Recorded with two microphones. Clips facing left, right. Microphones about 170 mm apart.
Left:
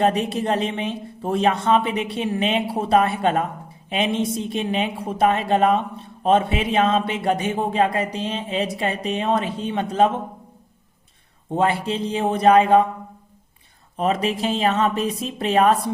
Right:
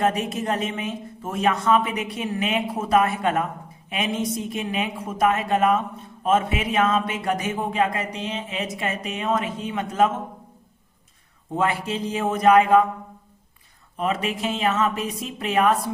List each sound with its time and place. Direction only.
0.0 s a woman's voice: 30° left (ahead or behind)
11.5 s a woman's voice: 30° left (ahead or behind)
13.9 s speech: 35° left (ahead or behind)